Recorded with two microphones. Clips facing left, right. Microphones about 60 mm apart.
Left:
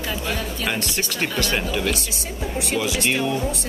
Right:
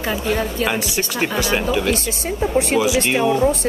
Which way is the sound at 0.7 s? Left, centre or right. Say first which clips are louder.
Right 4 dB; centre.